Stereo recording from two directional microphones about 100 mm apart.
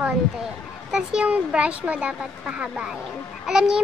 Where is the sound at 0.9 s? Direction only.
10° right (ahead or behind).